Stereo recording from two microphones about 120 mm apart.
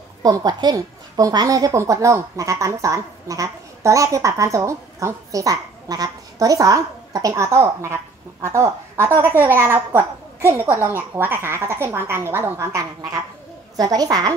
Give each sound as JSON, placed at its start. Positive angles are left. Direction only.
{"t": 0.2, "sound": "a woman's voice", "side_deg": -30}